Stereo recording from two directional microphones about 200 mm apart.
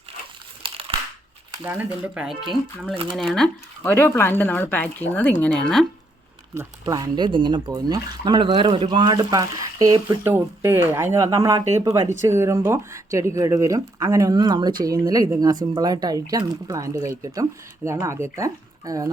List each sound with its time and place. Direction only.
0.6 s crushing: 25° right (ahead or behind)
1.6 s speech: 10° right (ahead or behind)
2.9 s speech: 25° right (ahead or behind)
3.2 s speech: 5° left (ahead or behind)
6.5 s speech: 15° right (ahead or behind)